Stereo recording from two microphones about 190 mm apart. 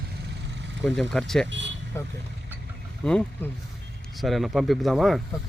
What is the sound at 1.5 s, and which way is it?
Speech, 70° right (ahead or behind).